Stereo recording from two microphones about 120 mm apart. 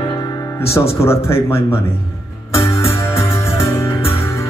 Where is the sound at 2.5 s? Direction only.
25° left (ahead or behind).